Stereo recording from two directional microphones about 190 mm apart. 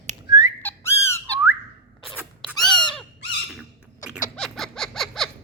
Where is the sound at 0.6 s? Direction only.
10° left (ahead or behind).